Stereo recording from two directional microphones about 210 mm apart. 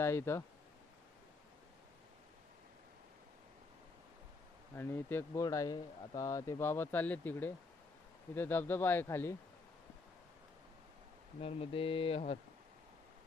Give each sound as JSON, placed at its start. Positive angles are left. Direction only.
{"t": 0.0, "sound": "speech", "side_deg": 10}
{"t": 4.7, "sound": "speech", "side_deg": 10}
{"t": 11.3, "sound": "speech", "side_deg": 25}